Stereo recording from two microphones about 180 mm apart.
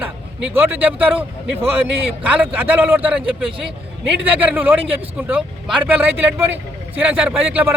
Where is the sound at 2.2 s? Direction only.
10° right (ahead or behind).